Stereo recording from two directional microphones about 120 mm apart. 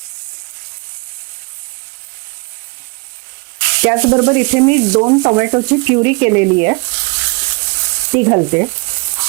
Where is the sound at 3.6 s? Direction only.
20° right (ahead or behind).